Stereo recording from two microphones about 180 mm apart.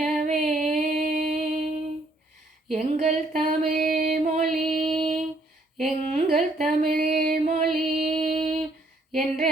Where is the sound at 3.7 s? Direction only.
45° right (ahead or behind).